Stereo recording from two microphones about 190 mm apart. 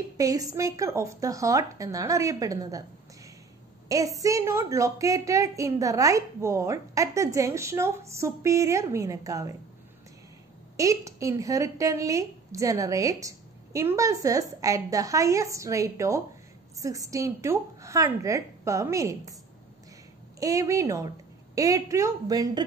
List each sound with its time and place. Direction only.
0.2 s a woman's voice: 20° right (ahead or behind)
3.9 s a woman's voice: 15° right (ahead or behind)
10.8 s a woman's voice: 15° right (ahead or behind)
20.3 s a woman's voice: 15° right (ahead or behind)